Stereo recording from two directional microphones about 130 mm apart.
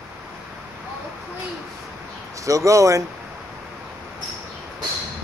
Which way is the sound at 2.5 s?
25° right (ahead or behind).